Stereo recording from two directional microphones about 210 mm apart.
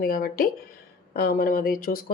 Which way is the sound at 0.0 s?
45° left (ahead or behind).